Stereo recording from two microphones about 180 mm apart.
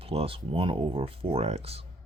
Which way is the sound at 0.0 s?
30° right (ahead or behind).